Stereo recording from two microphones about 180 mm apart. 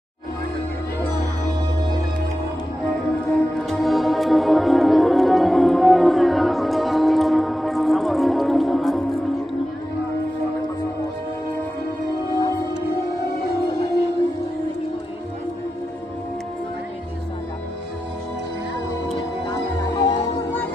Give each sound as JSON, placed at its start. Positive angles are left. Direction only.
{"t": 3.3, "sound": "music", "side_deg": 5}
{"t": 19.4, "sound": "music", "side_deg": 20}